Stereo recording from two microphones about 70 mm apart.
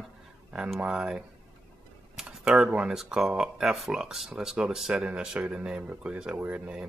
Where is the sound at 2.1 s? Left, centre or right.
Centre.